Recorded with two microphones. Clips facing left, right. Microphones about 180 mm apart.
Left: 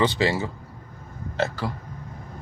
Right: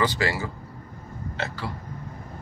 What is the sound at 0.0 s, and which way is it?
Speech, 25° left (ahead or behind).